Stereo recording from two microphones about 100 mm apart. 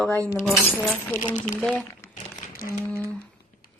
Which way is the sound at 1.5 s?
Centre (ahead or behind).